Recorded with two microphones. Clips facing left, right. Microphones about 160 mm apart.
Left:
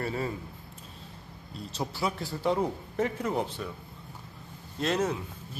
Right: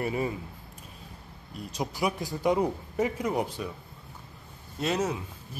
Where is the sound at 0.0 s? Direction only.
15° right (ahead or behind).